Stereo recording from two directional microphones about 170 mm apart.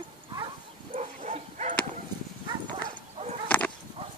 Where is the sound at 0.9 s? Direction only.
45° right (ahead or behind).